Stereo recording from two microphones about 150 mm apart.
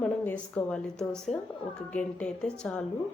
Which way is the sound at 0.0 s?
5° left (ahead or behind).